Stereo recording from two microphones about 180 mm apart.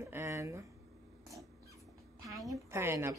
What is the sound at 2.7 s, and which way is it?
Speech, 15° right (ahead or behind).